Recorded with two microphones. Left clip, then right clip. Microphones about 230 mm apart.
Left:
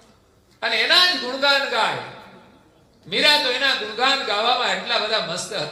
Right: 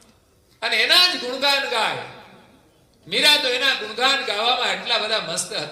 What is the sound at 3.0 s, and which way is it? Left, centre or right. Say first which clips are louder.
A man's voice: even; right.